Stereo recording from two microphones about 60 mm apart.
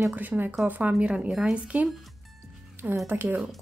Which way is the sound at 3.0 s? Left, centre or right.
Right.